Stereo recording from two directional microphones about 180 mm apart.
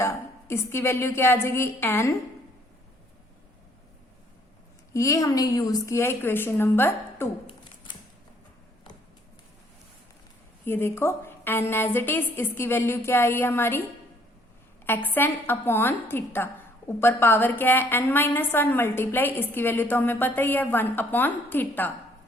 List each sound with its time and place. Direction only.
0.0 s a woman's voice: 15° left (ahead or behind)
4.9 s a woman's voice: 15° left (ahead or behind)
10.7 s a woman's voice: 15° left (ahead or behind)
14.8 s a woman's voice: 10° left (ahead or behind)